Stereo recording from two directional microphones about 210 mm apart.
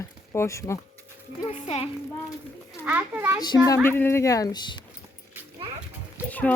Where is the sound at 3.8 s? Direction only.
10° left (ahead or behind).